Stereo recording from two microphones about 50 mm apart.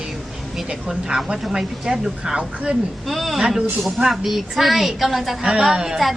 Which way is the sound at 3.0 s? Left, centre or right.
Centre.